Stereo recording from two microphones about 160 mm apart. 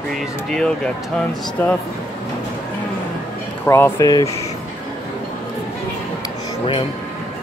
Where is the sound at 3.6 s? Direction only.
15° left (ahead or behind).